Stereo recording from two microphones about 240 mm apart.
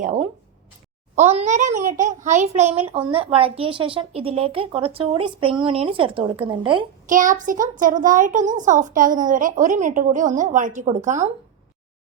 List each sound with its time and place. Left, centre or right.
0.0 s a child's voice: right
7.1 s a child's voice: right